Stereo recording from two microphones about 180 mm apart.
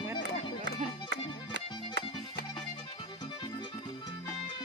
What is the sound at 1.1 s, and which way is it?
Music, 75° right (ahead or behind).